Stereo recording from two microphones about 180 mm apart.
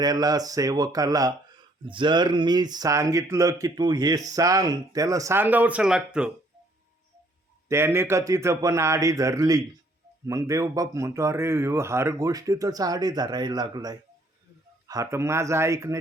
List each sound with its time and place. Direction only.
0.0 s speech: 20° right (ahead or behind); by 6.3 s 5° right (ahead or behind)
7.7 s speech: 15° right (ahead or behind)